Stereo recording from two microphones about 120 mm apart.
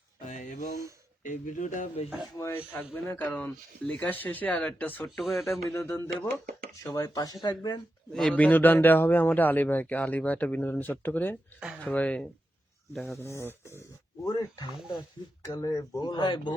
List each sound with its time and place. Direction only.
0.3 s a sound: 90° left
1.2 s speech: 90° left
2.4 s a man's voice: 20° left (ahead or behind)
5.2 s speech: centre (ahead or behind)
5.6 s speech: 25° left (ahead or behind)
8.1 s a man's voice: 5° left (ahead or behind)
13.1 s speech: 25° left (ahead or behind); by 16.6 s 40° left (ahead or behind)